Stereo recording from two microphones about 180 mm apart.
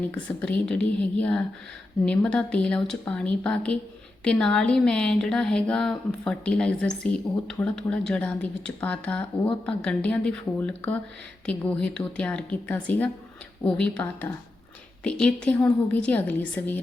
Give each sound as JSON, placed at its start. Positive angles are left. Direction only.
{"t": 0.1, "sound": "a woman's voice", "side_deg": 5}